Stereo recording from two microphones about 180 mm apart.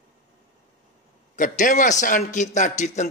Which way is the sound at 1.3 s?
45° left (ahead or behind).